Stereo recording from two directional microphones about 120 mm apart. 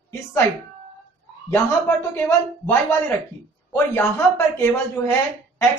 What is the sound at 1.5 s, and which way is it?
A woman's voice, 20° left (ahead or behind).